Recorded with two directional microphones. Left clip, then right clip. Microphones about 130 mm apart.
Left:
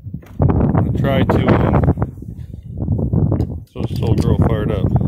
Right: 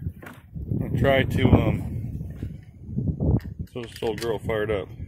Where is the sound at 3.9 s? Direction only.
20° left (ahead or behind).